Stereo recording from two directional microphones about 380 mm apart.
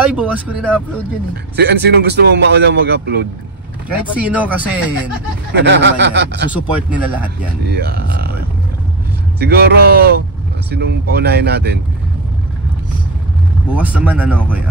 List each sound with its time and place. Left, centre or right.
0.0 s speech: centre
1.3 s speech: right
4.1 s speech: centre
5.5 s speech: right
6.5 s speech: centre
7.6 s speech: right
13.7 s speech: centre